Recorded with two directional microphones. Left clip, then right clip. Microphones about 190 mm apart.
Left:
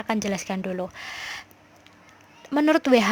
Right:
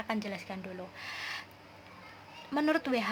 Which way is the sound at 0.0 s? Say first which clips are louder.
Left 9 dB; 50° left (ahead or behind).